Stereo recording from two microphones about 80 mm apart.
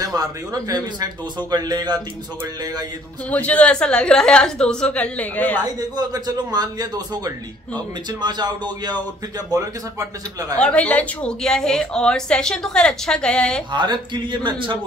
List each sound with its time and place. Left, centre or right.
0.0 s speech: right
3.3 s a woman's voice: centre
5.8 s a man's voice: right
9.5 s speech: right
10.6 s a woman's voice: centre
13.7 s speech: right